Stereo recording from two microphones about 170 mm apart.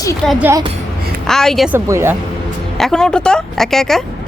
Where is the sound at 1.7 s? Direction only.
15° right (ahead or behind).